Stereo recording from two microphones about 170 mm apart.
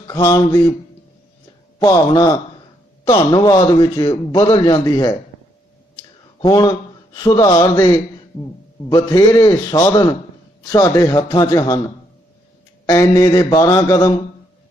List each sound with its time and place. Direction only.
0.1 s a man's voice: 20° left (ahead or behind)
1.8 s a man's voice: 20° left (ahead or behind)
6.4 s a man's voice: 25° left (ahead or behind)
12.8 s a man's voice: 20° left (ahead or behind)